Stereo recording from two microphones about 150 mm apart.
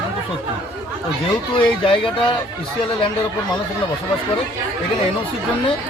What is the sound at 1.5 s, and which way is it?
Speech, 35° left (ahead or behind).